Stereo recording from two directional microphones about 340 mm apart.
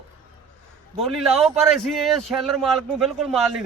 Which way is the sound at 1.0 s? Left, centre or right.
Centre.